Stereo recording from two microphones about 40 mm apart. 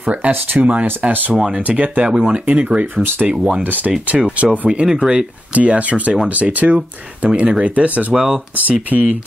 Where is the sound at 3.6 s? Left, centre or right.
Right.